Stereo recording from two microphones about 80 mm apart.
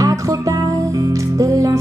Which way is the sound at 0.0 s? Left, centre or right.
Right.